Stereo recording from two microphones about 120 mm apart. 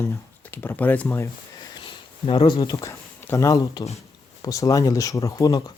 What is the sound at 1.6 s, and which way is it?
Sniff, 45° left (ahead or behind).